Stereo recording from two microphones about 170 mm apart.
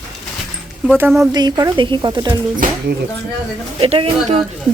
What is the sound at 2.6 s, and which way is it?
Speech, 55° right (ahead or behind).